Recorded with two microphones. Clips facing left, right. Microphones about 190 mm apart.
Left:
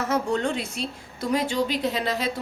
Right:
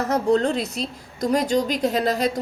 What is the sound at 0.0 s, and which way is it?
A woman's voice, 35° right (ahead or behind).